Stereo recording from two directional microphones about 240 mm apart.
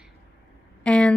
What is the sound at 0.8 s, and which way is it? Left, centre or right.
Speech, centre.